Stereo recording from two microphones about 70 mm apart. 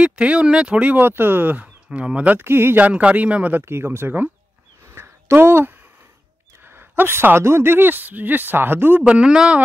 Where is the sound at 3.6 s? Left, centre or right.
Right.